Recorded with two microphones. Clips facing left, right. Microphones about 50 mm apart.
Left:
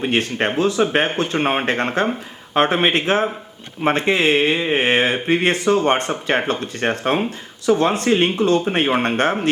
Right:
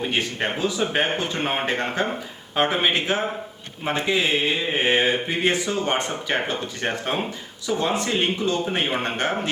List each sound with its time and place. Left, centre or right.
0.1 s speech: left